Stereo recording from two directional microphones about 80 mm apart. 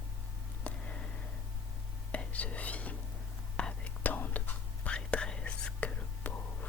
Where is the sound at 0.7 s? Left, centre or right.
Centre.